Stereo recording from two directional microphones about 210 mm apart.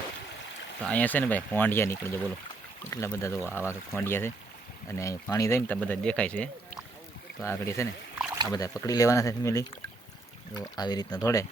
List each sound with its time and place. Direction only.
0.8 s speech: 5° left (ahead or behind)